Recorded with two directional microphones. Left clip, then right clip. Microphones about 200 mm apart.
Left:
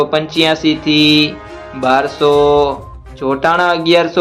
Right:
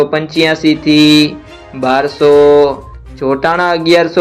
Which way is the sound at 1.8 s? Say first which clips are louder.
Right 1 dB; 5° right (ahead or behind).